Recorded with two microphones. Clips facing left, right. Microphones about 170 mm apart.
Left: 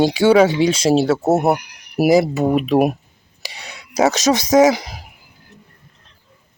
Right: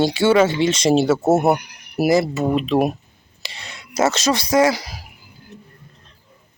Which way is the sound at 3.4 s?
15° left (ahead or behind).